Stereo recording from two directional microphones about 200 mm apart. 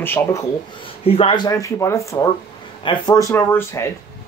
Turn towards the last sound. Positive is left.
turn(degrees=10)  # may be behind; listen again after turning